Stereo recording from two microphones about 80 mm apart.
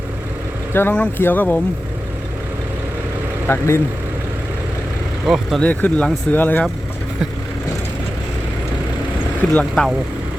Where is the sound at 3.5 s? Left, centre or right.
Left.